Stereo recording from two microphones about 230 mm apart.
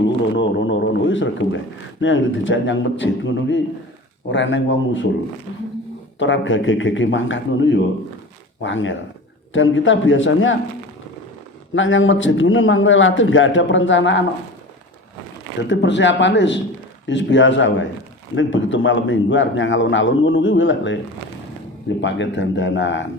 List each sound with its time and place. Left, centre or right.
0.3 s speech: left
6.1 s a man's voice: left
11.7 s a man's voice: left
15.7 s a man's voice: left
22.0 s speech: left